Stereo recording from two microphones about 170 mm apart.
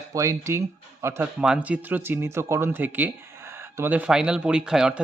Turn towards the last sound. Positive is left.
turn(degrees=-5)  # may be behind; listen again after turning